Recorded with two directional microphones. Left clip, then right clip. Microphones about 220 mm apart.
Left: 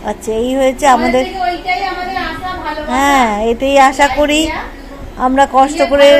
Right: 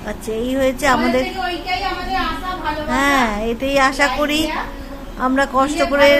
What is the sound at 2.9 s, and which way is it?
A woman's voice, 15° left (ahead or behind).